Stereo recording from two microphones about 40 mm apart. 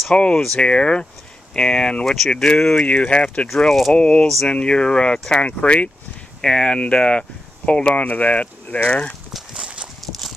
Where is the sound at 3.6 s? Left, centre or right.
Centre.